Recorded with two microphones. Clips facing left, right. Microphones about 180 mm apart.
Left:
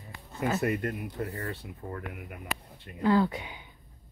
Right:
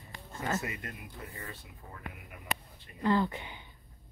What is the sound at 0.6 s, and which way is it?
Speech, 60° left (ahead or behind).